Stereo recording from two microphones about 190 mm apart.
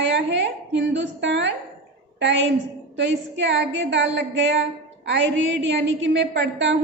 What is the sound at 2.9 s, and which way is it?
A woman's voice, 70° right (ahead or behind).